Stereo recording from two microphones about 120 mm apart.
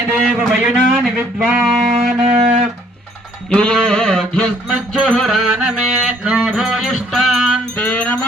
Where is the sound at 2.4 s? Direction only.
70° right (ahead or behind).